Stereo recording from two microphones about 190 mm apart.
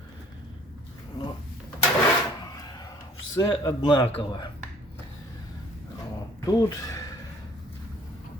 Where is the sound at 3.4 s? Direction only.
25° left (ahead or behind).